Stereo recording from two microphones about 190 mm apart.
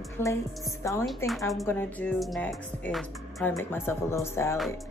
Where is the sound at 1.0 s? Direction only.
Centre (ahead or behind).